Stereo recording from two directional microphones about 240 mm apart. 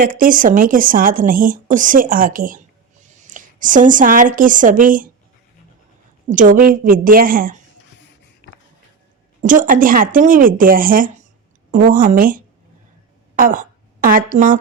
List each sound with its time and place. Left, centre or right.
0.0 s a woman's voice: right
6.2 s speech: right
8.4 s music: left
9.4 s a woman's voice: right